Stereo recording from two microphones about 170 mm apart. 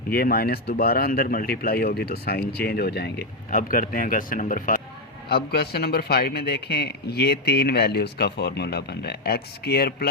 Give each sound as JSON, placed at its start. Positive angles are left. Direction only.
{"t": 0.1, "sound": "speech", "side_deg": 60}
{"t": 3.5, "sound": "speech", "side_deg": 55}
{"t": 5.3, "sound": "a man's voice", "side_deg": 70}